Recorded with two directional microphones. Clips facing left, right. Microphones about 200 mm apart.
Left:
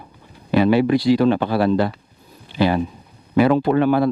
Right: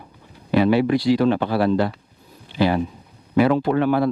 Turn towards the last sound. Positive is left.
turn(degrees=20)  # may be behind; listen again after turning